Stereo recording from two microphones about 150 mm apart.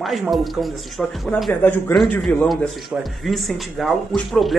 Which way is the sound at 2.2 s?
Centre (ahead or behind).